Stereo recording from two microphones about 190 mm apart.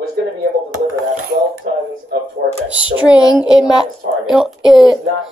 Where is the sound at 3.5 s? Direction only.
5° right (ahead or behind).